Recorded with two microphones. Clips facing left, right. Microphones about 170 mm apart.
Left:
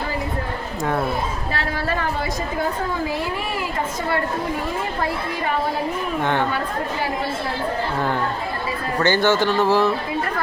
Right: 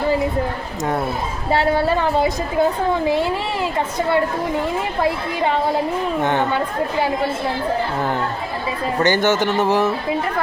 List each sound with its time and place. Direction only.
1.5 s speech: 25° right (ahead or behind)
6.2 s speech: 20° right (ahead or behind)
9.0 s speech: 20° right (ahead or behind)